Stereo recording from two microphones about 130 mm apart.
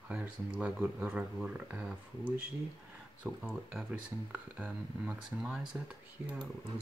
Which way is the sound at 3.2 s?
10° right (ahead or behind).